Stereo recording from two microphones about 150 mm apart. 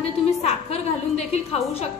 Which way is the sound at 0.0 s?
45° left (ahead or behind).